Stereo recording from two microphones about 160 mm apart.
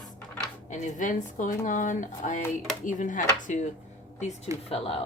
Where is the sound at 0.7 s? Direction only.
50° left (ahead or behind).